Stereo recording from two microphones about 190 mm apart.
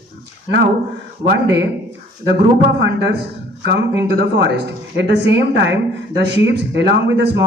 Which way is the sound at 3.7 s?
65° right (ahead or behind).